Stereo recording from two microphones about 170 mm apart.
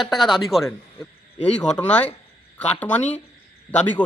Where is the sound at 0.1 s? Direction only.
Centre (ahead or behind).